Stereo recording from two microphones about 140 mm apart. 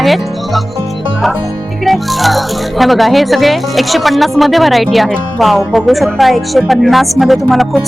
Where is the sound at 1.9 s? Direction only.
Centre (ahead or behind).